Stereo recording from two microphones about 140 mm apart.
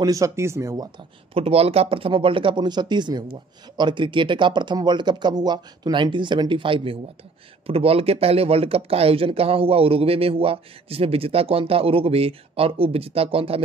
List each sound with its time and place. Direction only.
0.0 s speech: 25° right (ahead or behind)
0.9 s speech: 45° right (ahead or behind)